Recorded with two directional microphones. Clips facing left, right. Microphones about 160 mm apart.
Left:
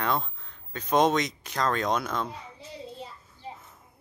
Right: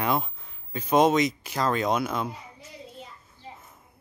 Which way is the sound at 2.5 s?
30° left (ahead or behind).